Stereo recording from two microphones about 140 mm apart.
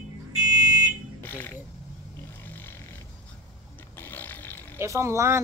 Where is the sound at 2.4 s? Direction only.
15° left (ahead or behind).